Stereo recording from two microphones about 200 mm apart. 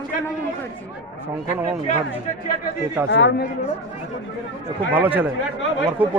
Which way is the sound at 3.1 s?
60° left (ahead or behind).